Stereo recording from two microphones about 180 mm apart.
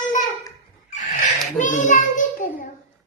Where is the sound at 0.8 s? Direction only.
45° left (ahead or behind).